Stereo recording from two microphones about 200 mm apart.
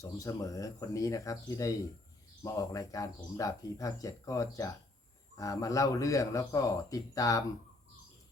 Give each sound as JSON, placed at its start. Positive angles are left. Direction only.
{"t": 0.0, "sound": "speech", "side_deg": 15}